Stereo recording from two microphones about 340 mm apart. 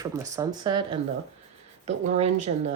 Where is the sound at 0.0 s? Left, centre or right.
Centre.